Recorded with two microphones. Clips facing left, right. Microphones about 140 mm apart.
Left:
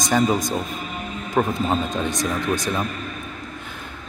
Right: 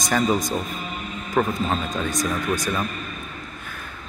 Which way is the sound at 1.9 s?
20° left (ahead or behind).